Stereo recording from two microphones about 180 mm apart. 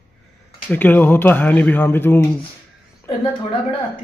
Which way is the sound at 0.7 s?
10° left (ahead or behind).